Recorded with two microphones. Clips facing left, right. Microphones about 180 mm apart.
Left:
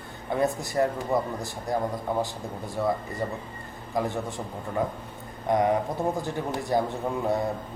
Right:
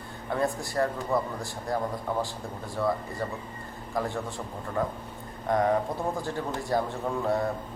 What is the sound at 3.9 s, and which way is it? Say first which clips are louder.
Speech: left 2 dB; 15° left (ahead or behind).